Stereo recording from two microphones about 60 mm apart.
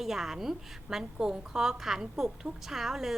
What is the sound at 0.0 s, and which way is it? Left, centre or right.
A woman's voice, centre.